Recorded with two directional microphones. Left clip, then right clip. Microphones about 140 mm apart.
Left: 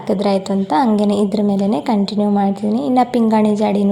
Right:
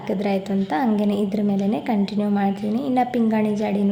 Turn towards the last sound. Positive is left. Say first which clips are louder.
# left 7 dB
turn(degrees=30)  # may be behind; listen again after turning